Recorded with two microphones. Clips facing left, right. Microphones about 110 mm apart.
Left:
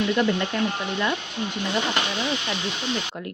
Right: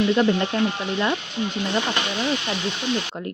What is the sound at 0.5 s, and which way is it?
Frying, 30° right (ahead or behind).